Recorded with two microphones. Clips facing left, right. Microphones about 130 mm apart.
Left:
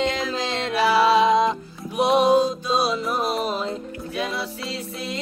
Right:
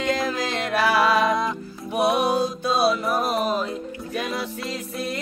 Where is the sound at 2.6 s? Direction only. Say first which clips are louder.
Right 2 dB; 50° right (ahead or behind).